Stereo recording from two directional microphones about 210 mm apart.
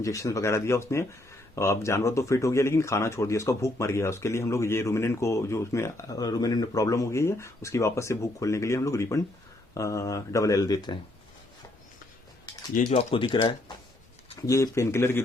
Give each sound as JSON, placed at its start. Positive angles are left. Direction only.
{"t": 0.0, "sound": "speech", "side_deg": 15}
{"t": 12.9, "sound": "speech", "side_deg": 30}